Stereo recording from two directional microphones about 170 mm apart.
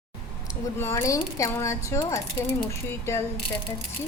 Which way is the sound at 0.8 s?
15° left (ahead or behind).